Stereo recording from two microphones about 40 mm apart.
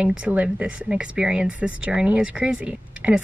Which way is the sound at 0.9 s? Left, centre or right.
Right.